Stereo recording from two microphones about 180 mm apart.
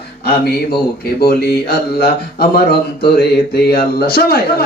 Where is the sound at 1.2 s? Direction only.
60° left (ahead or behind).